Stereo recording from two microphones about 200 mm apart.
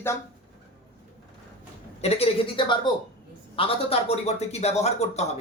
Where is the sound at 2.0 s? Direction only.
30° left (ahead or behind).